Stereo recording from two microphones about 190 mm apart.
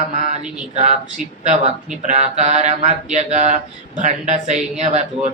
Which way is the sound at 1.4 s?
35° right (ahead or behind).